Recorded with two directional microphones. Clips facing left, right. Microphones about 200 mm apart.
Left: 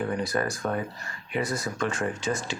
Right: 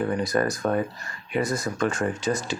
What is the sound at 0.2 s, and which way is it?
Speech, 40° right (ahead or behind).